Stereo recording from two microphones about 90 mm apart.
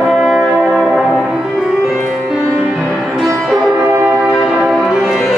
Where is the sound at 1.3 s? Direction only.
5° right (ahead or behind).